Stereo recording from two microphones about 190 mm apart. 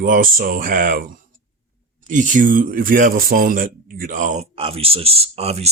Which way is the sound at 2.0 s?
40° right (ahead or behind).